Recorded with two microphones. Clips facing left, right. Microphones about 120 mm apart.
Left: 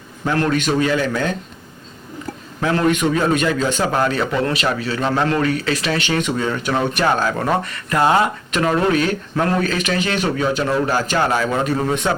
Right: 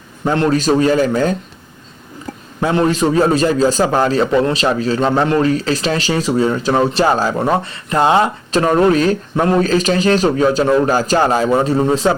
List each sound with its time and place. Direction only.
0.3 s speech: 25° right (ahead or behind)
0.5 s a man's voice: 35° right (ahead or behind)
2.6 s a man's voice: 30° right (ahead or behind)
8.5 s a man's voice: 35° right (ahead or behind)